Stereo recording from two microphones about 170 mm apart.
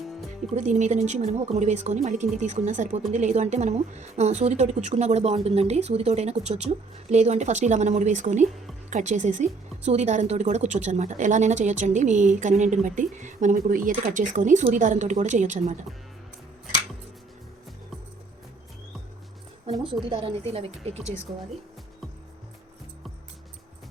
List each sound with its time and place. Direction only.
0.5 s a woman's voice: 45° right (ahead or behind)
20.1 s a woman's voice: 30° right (ahead or behind)